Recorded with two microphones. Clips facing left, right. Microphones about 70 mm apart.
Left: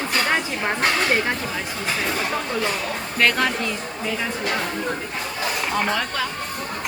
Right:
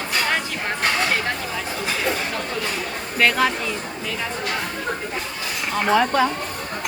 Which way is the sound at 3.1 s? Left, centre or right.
Centre.